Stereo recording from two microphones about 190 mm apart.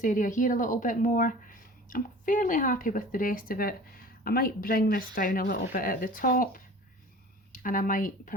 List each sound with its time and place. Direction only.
0.0 s a woman's voice: 45° left (ahead or behind)